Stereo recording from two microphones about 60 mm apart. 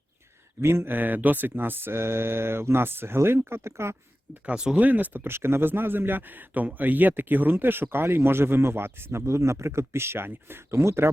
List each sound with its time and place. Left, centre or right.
0.6 s speech: right
4.4 s speech: centre
4.8 s speech: right